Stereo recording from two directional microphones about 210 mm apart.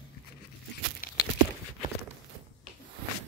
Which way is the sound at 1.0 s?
40° left (ahead or behind).